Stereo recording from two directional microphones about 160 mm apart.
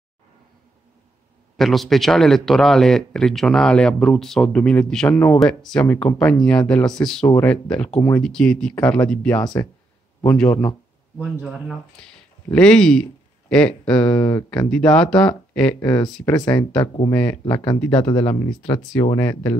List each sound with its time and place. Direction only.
1.6 s a man's voice: centre (ahead or behind)
9.4 s speech: 25° left (ahead or behind)
10.2 s speech: 10° left (ahead or behind)
17.8 s speech: 30° left (ahead or behind)